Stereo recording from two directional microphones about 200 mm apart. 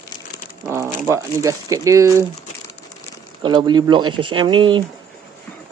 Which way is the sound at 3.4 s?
20° right (ahead or behind).